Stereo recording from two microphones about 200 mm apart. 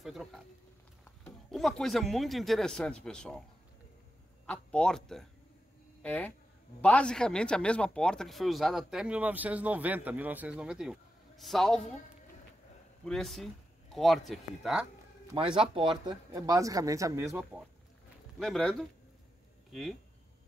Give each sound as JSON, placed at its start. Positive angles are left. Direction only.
{"t": 0.0, "sound": "a sound", "side_deg": 0}
{"t": 1.2, "sound": "speech", "side_deg": 0}
{"t": 4.5, "sound": "speech", "side_deg": 5}
{"t": 13.0, "sound": "speech", "side_deg": 0}
{"t": 15.3, "sound": "speech", "side_deg": -25}
{"t": 18.4, "sound": "speech", "side_deg": 0}